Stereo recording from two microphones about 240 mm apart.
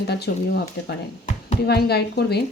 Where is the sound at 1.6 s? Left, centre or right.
Left.